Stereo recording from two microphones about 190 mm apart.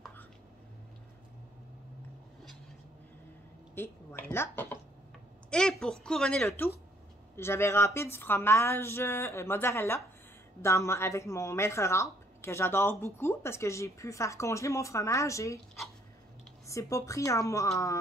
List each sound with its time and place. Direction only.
3.7 s speech: 10° left (ahead or behind)
16.6 s speech: 15° left (ahead or behind)